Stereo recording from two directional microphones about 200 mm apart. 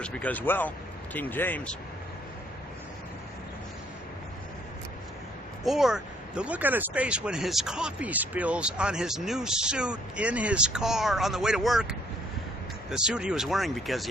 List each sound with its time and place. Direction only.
0.0 s speech: 5° left (ahead or behind)
5.6 s speech: centre (ahead or behind)